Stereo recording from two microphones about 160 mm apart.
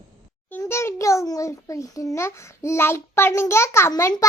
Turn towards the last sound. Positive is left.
turn(degrees=20)  # may be behind; listen again after turning